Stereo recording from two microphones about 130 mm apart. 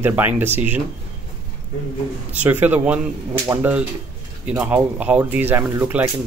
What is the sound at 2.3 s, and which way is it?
Speech, 15° right (ahead or behind).